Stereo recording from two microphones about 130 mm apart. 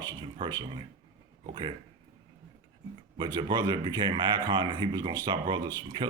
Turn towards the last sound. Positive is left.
turn(degrees=-35)  # may be behind; listen again after turning